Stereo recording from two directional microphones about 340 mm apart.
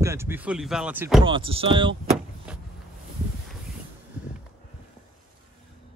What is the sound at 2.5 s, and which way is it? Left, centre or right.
Boat, centre.